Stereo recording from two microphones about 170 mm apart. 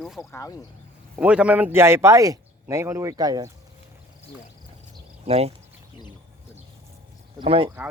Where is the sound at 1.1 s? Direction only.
5° right (ahead or behind).